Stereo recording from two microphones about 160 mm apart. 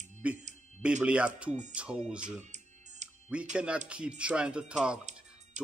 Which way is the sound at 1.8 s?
5° right (ahead or behind).